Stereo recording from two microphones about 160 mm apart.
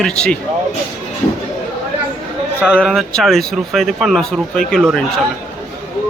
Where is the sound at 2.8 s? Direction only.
Centre (ahead or behind).